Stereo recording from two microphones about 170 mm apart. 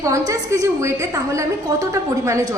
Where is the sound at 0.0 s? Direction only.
20° right (ahead or behind).